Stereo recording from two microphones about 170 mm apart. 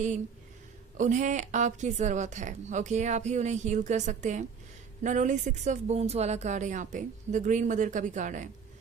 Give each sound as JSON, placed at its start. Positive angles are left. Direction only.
{"t": 0.9, "sound": "a woman's voice", "side_deg": -45}